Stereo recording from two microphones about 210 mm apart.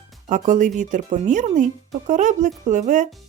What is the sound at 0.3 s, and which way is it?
Speech, 35° right (ahead or behind).